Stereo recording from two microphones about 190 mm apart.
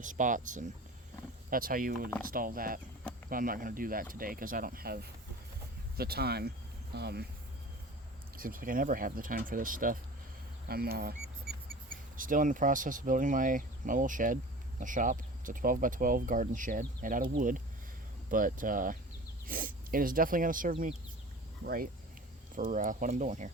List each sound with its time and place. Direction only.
0.0 s speech: 45° right (ahead or behind)
8.4 s speech: 50° right (ahead or behind)
12.1 s speech: 45° right (ahead or behind)